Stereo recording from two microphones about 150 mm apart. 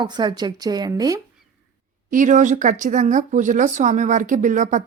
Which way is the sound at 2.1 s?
60° right (ahead or behind).